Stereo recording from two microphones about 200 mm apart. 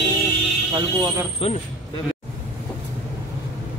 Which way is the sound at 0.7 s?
20° right (ahead or behind).